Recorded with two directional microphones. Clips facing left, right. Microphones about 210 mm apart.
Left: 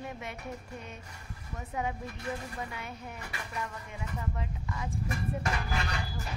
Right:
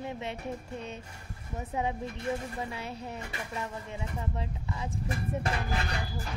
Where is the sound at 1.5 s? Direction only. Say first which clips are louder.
Right 3 dB; 25° right (ahead or behind).